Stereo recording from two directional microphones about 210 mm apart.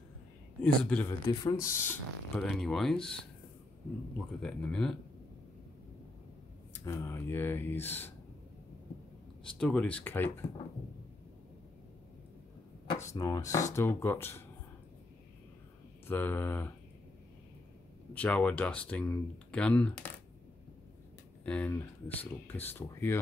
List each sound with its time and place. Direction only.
0.6 s speech: 5° left (ahead or behind)
1.2 s speech: 15° left (ahead or behind)
4.4 s speech: 5° left (ahead or behind)
6.7 s speech: 15° left (ahead or behind)
9.4 s speech: 5° left (ahead or behind)
13.1 s speech: 15° left (ahead or behind)
16.1 s speech: 10° left (ahead or behind)
18.1 s speech: 5° left (ahead or behind)
21.5 s speech: 5° left (ahead or behind)